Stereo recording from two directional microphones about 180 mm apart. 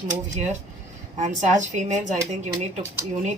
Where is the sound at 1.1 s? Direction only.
40° right (ahead or behind).